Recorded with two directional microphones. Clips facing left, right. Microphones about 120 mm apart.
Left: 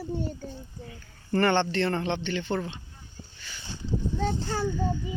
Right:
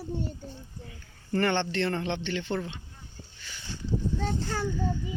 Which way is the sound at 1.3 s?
50° left (ahead or behind).